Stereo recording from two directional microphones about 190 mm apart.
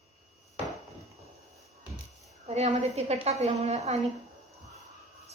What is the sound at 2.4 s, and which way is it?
A woman's voice, 35° right (ahead or behind).